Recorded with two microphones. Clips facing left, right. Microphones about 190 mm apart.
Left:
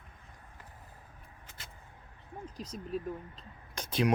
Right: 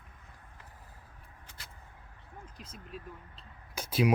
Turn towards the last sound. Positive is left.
turn(degrees=-5)  # may be behind; listen again after turning